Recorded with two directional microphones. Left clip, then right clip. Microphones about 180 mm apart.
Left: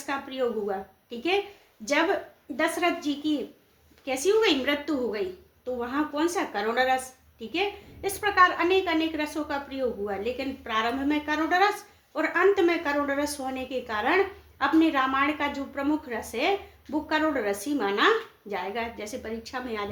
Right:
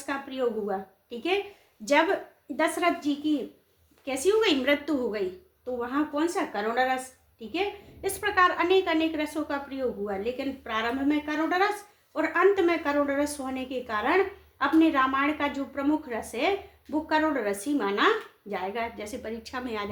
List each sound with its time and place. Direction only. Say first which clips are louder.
0.0 s a woman's voice: even; 25° right (ahead or behind)